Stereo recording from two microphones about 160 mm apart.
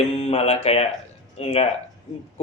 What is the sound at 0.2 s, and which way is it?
A man's voice, 40° left (ahead or behind).